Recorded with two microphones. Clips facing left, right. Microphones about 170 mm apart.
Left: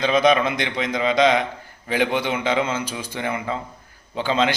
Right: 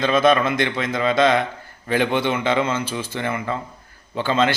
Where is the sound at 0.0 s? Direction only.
15° left (ahead or behind).